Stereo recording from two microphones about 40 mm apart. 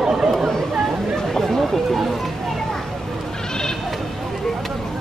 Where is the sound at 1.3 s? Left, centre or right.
Centre.